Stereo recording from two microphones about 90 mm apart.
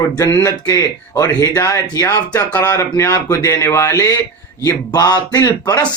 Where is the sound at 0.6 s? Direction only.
40° left (ahead or behind).